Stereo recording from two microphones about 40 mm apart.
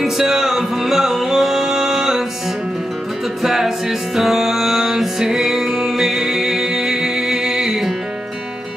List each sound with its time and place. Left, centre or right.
0.0 s music: centre
3.4 s music: centre